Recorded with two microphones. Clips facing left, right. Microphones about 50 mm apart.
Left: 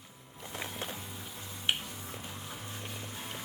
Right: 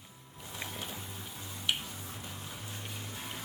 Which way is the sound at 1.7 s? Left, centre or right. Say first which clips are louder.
Left 1 dB; left.